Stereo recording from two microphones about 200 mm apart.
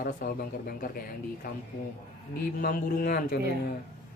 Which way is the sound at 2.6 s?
45° left (ahead or behind).